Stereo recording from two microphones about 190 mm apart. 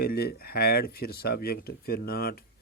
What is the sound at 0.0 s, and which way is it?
Speech, 55° left (ahead or behind).